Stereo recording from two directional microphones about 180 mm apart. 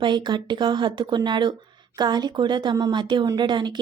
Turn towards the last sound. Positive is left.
turn(degrees=-25)  # may be behind; listen again after turning